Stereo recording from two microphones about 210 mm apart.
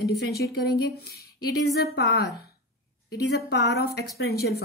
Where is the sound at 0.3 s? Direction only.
50° left (ahead or behind).